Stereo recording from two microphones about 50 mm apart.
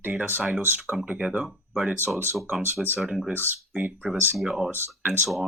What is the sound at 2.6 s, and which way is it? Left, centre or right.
Speech, right.